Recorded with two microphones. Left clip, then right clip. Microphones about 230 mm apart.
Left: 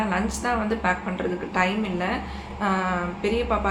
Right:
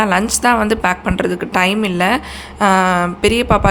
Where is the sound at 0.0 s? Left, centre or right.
Right.